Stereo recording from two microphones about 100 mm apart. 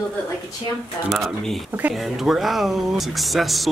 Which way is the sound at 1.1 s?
Centre (ahead or behind).